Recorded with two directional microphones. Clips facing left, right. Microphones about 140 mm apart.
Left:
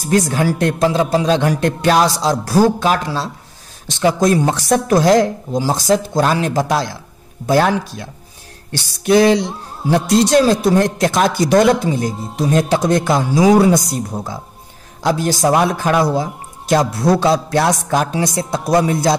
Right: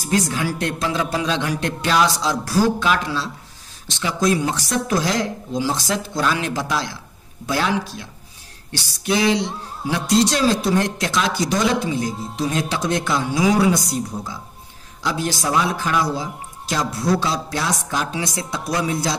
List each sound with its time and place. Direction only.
0.0 s a man's voice: 50° left (ahead or behind)